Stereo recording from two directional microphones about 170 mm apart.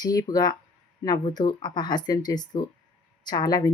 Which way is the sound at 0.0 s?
20° left (ahead or behind).